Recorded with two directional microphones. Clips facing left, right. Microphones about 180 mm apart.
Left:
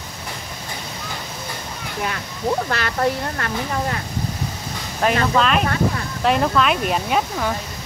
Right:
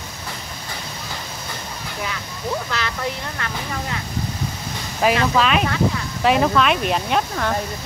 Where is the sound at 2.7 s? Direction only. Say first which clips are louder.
Left 5 dB; 55° left (ahead or behind).